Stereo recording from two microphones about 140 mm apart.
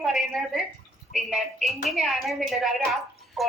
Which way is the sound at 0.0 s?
Centre (ahead or behind).